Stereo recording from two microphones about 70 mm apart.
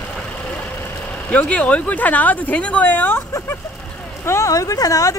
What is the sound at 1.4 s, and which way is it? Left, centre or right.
A woman's voice, centre.